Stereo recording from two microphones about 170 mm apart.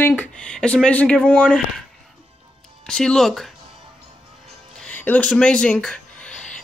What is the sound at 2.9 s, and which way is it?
Speech, 5° left (ahead or behind).